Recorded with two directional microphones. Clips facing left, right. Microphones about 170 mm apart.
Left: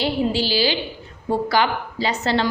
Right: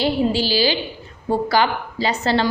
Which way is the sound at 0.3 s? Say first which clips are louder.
Right 1 dB; 40° right (ahead or behind).